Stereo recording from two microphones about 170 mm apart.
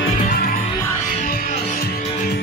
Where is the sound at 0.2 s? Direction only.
60° left (ahead or behind).